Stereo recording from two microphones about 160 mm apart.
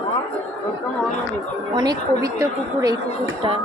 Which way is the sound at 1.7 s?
25° right (ahead or behind).